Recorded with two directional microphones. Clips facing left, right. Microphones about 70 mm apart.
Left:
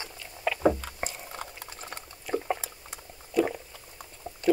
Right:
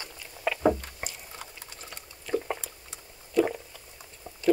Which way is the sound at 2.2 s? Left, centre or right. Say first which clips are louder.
Even; centre.